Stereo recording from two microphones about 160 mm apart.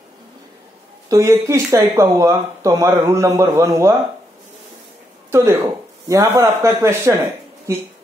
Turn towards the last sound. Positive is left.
turn(degrees=-15)  # may be behind; listen again after turning